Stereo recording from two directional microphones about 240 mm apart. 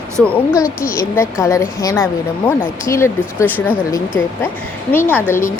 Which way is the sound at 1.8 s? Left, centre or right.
Centre.